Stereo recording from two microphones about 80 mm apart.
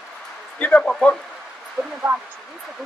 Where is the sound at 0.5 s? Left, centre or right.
Centre.